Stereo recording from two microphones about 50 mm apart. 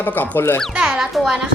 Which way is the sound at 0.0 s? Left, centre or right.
Left.